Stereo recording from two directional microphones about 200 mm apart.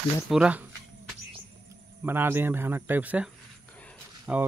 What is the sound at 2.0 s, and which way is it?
Speech, 10° right (ahead or behind).